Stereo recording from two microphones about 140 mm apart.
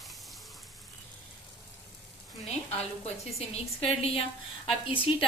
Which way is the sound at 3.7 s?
45° left (ahead or behind).